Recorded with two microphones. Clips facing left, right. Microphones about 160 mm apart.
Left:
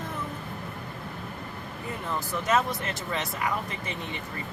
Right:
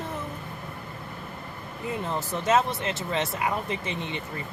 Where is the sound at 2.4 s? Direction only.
25° right (ahead or behind).